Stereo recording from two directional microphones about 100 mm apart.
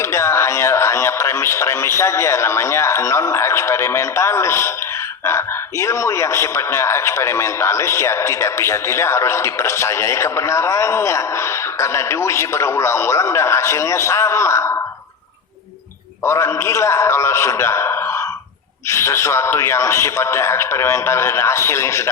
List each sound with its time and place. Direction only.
0.0 s speech: 25° left (ahead or behind)
5.8 s a man's voice: 30° left (ahead or behind)
16.2 s a man's voice: 25° left (ahead or behind)